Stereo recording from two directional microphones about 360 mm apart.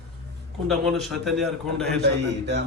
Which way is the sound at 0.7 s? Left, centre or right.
Centre.